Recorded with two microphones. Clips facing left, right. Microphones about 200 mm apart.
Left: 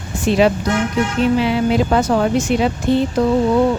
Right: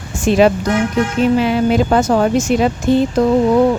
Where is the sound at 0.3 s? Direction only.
45° right (ahead or behind).